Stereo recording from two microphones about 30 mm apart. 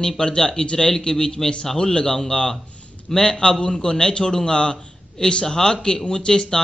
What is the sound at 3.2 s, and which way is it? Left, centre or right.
A man's voice, left.